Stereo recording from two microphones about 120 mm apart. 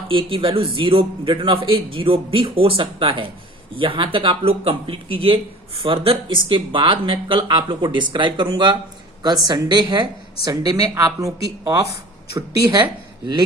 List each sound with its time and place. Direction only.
0.1 s a woman's voice: 45° right (ahead or behind); by 11.9 s 25° right (ahead or behind)